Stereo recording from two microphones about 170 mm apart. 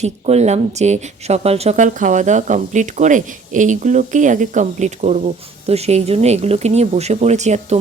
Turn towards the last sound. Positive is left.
turn(degrees=-40)  # may be behind; listen again after turning